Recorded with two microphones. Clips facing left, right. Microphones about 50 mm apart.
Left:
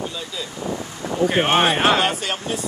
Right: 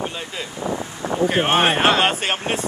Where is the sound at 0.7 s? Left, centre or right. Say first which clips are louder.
Right 3 dB; right.